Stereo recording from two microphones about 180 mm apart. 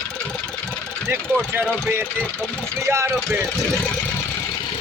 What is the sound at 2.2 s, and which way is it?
Speech, 10° left (ahead or behind).